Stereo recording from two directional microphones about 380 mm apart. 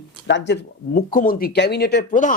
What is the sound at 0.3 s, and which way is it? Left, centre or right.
Speech, left.